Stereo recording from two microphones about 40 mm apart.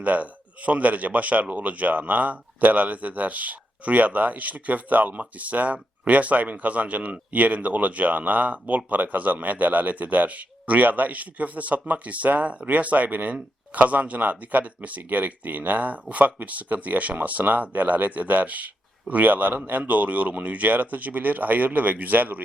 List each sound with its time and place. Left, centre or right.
0.0 s a man's voice: right